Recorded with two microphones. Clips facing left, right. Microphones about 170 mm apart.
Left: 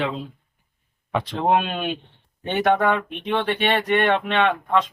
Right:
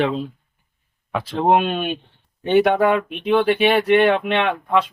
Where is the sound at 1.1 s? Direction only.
5° right (ahead or behind).